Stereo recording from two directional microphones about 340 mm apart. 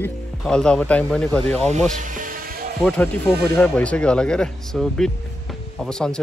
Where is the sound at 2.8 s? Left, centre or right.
Centre.